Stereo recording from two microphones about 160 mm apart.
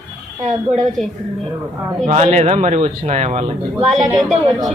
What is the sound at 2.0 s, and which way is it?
Speech, 45° right (ahead or behind).